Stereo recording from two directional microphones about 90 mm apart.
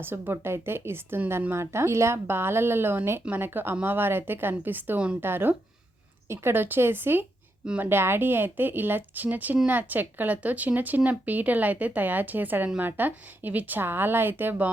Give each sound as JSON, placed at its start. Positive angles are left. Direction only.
{"t": 0.0, "sound": "speech", "side_deg": -25}